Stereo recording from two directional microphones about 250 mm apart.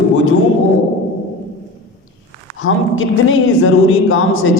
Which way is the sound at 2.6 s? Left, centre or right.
Left.